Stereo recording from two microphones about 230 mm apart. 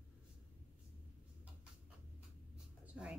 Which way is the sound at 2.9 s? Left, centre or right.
Centre.